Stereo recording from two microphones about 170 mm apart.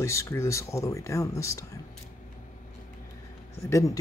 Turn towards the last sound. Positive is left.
turn(degrees=15)  # may be behind; listen again after turning